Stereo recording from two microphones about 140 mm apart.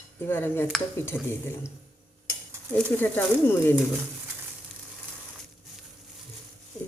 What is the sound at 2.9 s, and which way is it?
Speech, 15° left (ahead or behind).